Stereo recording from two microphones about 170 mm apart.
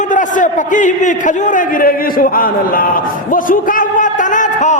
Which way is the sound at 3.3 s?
50° left (ahead or behind).